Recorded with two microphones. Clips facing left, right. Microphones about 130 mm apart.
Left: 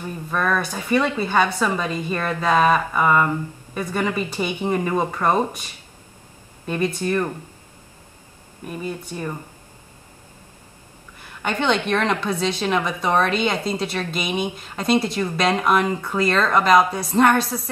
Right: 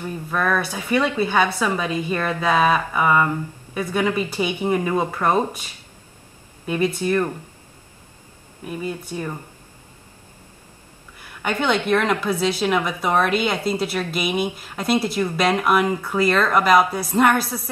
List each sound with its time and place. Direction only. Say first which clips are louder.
0.3 s speech: even; 5° right (ahead or behind)
6.6 s speech: right 2 dB; 5° right (ahead or behind)
8.6 s speech: right 1 dB; 10° right (ahead or behind)
11.4 s a woman's voice: even; 5° right (ahead or behind)